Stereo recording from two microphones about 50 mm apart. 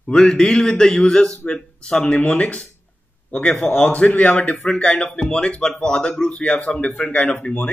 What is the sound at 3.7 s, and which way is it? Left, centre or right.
Speech, left.